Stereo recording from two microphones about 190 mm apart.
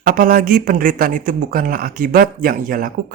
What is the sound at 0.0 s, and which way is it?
Speech, 50° right (ahead or behind).